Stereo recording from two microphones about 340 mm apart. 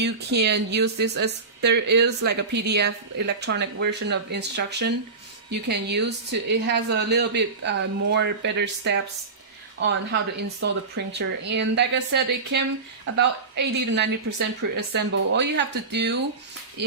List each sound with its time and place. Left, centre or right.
0.0 s speech: right